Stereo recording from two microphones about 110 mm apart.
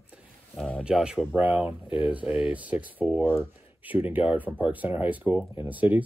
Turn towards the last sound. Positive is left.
turn(degrees=-15)  # may be behind; listen again after turning